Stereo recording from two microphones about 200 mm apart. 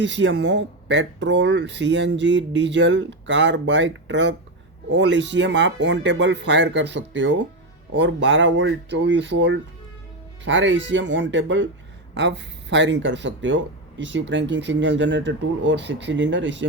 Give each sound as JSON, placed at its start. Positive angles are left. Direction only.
{"t": 0.0, "sound": "speech", "side_deg": -65}